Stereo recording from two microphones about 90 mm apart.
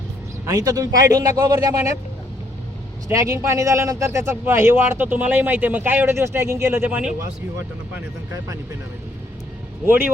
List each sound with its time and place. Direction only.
0.4 s speech: 40° right (ahead or behind)
3.1 s a man's voice: 35° right (ahead or behind)
9.8 s a man's voice: 20° right (ahead or behind)